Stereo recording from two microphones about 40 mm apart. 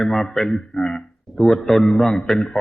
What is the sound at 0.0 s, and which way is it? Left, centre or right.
Speech, centre.